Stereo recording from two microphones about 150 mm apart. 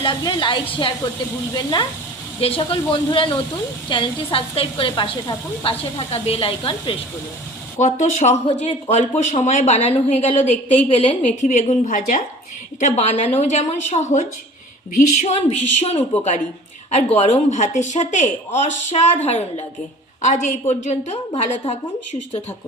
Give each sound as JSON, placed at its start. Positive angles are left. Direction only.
{"t": 0.0, "sound": "a woman's voice", "side_deg": 30}
{"t": 7.8, "sound": "speech", "side_deg": 50}
{"t": 11.4, "sound": "a woman's voice", "side_deg": 60}